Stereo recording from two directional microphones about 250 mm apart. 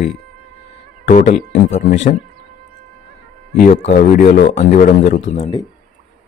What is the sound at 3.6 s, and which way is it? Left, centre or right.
Speech, left.